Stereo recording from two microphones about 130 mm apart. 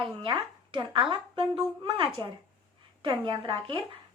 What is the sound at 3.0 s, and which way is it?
Speech, 40° right (ahead or behind).